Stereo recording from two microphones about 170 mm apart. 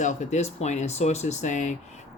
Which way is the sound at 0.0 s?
45° left (ahead or behind).